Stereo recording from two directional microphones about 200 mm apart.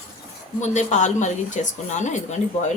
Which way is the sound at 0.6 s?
35° left (ahead or behind).